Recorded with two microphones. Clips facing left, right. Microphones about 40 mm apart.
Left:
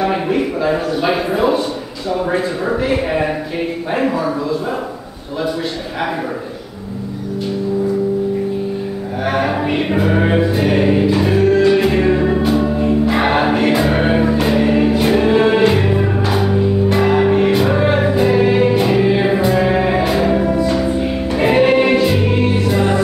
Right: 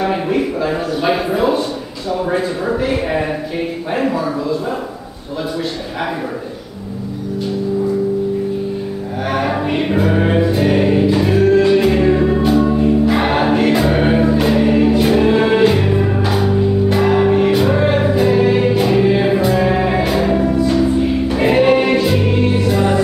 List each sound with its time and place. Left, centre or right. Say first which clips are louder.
0.0 s a sound: even; centre
2.0 s speech: even; centre
9.2 s music: left 1 dB; centre